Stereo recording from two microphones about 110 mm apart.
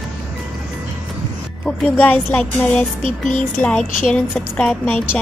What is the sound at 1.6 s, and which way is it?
A woman's voice, 15° left (ahead or behind).